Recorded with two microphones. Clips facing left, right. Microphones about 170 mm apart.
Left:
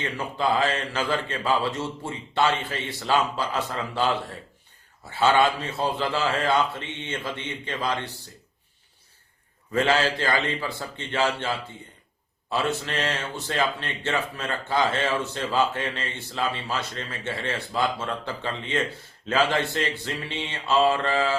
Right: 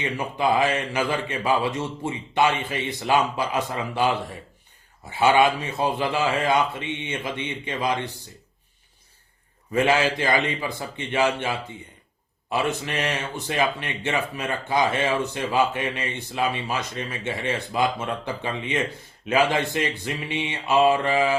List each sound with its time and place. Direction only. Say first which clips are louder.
0.0 s speech: right 2 dB; 15° right (ahead or behind)
9.7 s speech: right 2 dB; 15° right (ahead or behind)